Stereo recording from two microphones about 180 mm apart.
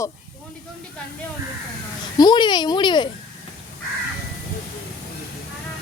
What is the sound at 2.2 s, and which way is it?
Speech, 25° left (ahead or behind).